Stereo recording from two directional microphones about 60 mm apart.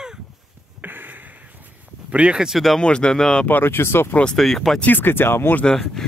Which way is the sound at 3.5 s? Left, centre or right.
Left.